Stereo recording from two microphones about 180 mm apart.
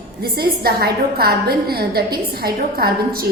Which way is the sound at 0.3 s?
60° right (ahead or behind).